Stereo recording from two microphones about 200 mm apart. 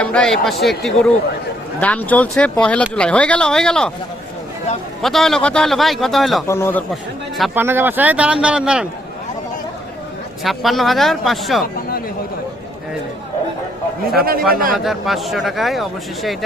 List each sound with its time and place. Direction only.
0.0 s speech: 5° left (ahead or behind)
5.0 s speech: centre (ahead or behind)
6.5 s speech: 10° left (ahead or behind)
7.3 s speech: centre (ahead or behind)
7.6 s speech: 10° right (ahead or behind)
10.4 s speech: centre (ahead or behind)
14.2 s a man's voice: 50° right (ahead or behind)
14.8 s speech: centre (ahead or behind)